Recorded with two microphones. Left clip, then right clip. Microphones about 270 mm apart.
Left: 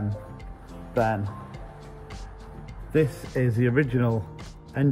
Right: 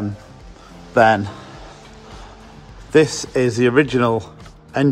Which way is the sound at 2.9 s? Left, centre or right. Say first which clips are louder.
Right 10 dB; centre.